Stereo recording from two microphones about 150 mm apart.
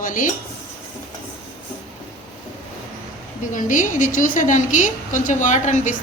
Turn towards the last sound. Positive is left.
turn(degrees=55)  # may be behind; listen again after turning